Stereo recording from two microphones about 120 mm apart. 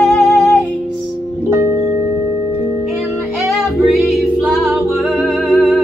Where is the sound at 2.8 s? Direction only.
Centre (ahead or behind).